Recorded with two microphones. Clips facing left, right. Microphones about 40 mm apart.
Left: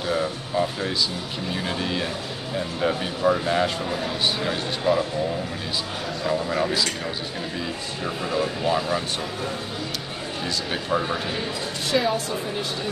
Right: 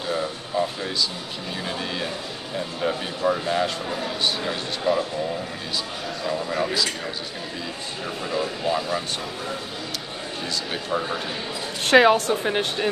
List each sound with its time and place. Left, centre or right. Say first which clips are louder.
0.2 s music: left 1 dB; centre
1.8 s a man's voice: left 2 dB; centre
6.2 s speech: left 2 dB; centre
8.0 s speech: left 2 dB; centre
10.4 s a man's voice: left 1 dB; centre
11.8 s a woman's voice: right 8 dB; right